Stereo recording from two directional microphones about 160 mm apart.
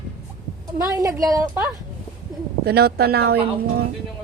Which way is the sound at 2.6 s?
80° right.